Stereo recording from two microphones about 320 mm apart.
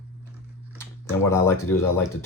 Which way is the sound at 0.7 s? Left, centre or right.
Centre.